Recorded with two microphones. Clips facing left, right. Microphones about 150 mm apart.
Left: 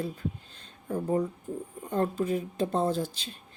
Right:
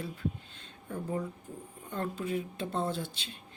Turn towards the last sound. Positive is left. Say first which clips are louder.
# left 6 dB
turn(degrees=40)  # may be behind; listen again after turning